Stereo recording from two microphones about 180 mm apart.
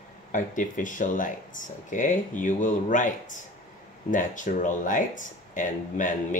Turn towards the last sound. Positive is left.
turn(degrees=45)  # may be behind; listen again after turning